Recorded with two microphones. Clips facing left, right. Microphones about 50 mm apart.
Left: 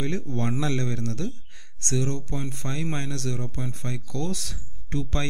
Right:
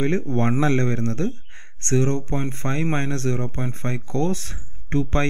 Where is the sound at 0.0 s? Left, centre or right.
Right.